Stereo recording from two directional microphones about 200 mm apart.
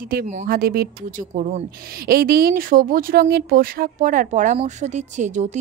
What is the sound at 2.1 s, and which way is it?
A woman's voice, 50° right (ahead or behind).